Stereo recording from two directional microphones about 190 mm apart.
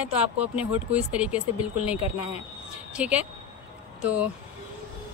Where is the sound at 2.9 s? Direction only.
5° right (ahead or behind).